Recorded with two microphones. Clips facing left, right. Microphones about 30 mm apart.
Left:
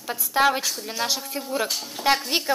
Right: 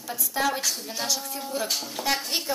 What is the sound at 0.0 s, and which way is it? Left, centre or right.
Speech, left.